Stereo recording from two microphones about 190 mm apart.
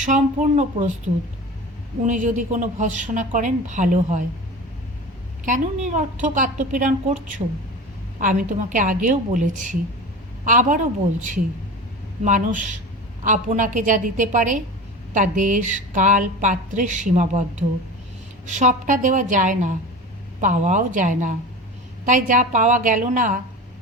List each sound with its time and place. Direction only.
0.0 s a woman's voice: 40° right (ahead or behind)
2.0 s a woman's voice: 40° right (ahead or behind)
5.5 s a woman's voice: 40° right (ahead or behind)